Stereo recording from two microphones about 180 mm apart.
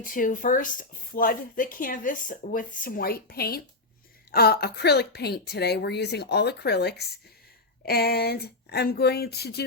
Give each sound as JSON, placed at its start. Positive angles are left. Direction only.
{"t": 0.0, "sound": "a woman's voice", "side_deg": 50}